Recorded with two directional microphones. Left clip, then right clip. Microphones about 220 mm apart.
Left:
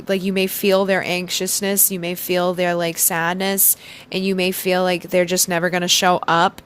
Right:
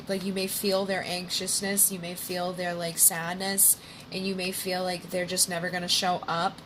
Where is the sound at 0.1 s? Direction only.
45° left (ahead or behind).